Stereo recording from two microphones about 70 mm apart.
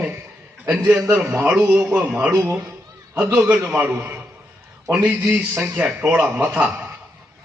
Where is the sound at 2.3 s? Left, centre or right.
Right.